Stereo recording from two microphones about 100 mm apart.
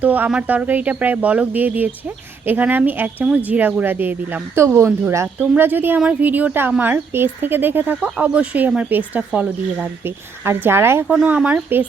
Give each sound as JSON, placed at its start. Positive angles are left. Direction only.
{"t": 0.0, "sound": "speech", "side_deg": -15}
{"t": 10.0, "sound": "speech", "side_deg": -20}
{"t": 11.1, "sound": "speech", "side_deg": -10}